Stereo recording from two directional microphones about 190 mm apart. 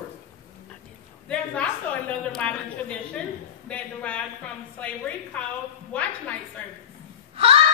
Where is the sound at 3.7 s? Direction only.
5° left (ahead or behind).